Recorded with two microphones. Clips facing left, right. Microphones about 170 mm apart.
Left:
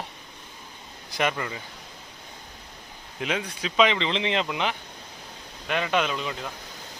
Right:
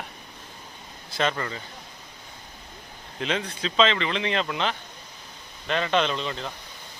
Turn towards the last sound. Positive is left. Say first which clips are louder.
# right 1 dB
turn(degrees=10)  # may be behind; listen again after turning